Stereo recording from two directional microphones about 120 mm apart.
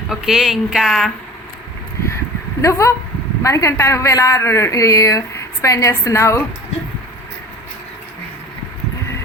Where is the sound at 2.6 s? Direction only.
25° left (ahead or behind).